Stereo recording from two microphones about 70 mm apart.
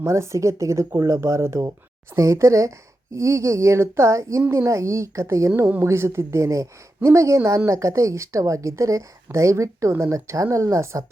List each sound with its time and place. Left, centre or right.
0.0 s speech: right